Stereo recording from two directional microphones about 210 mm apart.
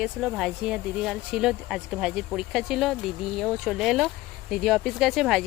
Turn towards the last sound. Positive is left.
turn(degrees=0)  # may be behind; listen again after turning